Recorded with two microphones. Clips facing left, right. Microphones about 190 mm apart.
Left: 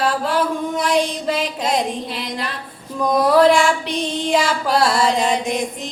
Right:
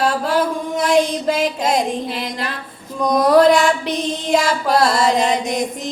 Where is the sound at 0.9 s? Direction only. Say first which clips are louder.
Right 4 dB; 45° right (ahead or behind).